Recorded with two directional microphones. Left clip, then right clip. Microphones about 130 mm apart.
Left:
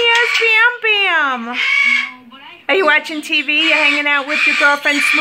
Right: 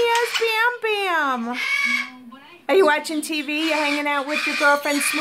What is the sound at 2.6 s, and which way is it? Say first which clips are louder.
A woman's voice: left 4 dB; 40° right (ahead or behind).